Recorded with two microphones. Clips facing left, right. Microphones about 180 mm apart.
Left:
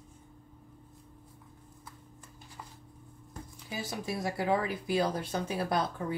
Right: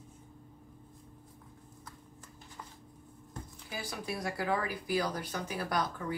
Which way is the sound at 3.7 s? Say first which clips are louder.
Left 3 dB; 25° left (ahead or behind).